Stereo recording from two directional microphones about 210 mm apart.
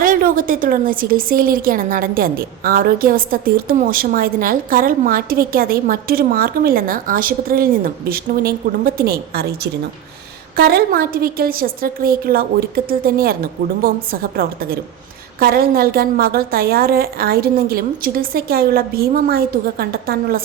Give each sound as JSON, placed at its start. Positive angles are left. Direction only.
{"t": 0.0, "sound": "a woman's voice", "side_deg": -40}
{"t": 10.6, "sound": "a woman's voice", "side_deg": -45}